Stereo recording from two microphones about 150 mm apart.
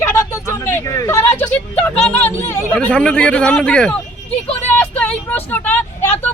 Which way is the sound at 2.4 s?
10° left (ahead or behind).